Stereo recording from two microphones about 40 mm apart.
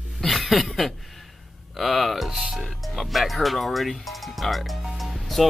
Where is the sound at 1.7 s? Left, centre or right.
Centre.